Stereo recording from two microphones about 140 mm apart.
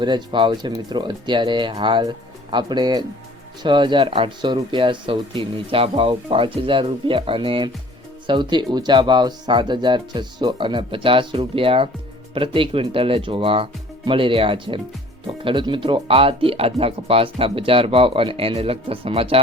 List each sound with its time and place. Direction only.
0.0 s speech: 35° right (ahead or behind)